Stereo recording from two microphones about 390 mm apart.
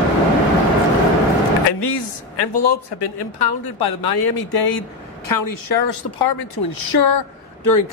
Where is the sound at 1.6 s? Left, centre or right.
Left.